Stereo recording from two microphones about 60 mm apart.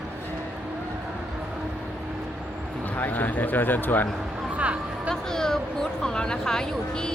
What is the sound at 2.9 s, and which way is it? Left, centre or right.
A man's voice, left.